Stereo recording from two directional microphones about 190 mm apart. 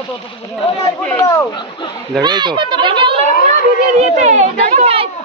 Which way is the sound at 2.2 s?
25° right (ahead or behind).